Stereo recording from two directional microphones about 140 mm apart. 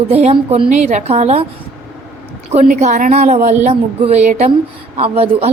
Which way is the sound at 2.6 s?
65° right (ahead or behind).